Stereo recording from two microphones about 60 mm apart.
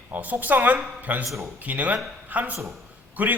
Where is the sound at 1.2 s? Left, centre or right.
Right.